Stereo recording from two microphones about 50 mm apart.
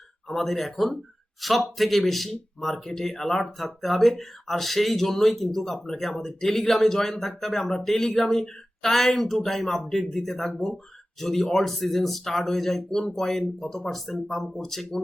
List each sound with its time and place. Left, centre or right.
0.3 s speech: centre